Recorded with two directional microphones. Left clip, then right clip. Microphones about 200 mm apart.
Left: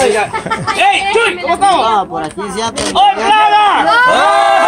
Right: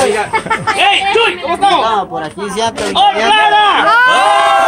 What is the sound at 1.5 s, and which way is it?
Speech, 25° left (ahead or behind).